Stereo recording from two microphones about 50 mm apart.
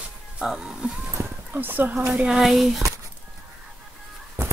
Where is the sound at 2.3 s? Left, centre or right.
Centre.